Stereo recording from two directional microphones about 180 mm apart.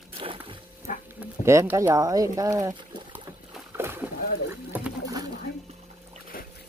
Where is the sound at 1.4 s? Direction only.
15° right (ahead or behind).